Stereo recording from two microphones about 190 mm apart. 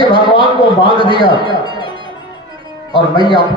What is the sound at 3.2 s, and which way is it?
Speech, 25° right (ahead or behind).